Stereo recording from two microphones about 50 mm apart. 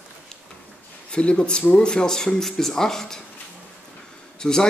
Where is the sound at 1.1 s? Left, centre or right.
Centre.